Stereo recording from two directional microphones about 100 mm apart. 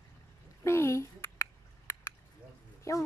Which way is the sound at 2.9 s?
30° left (ahead or behind).